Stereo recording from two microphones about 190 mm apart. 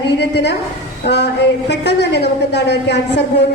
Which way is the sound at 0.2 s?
65° left (ahead or behind).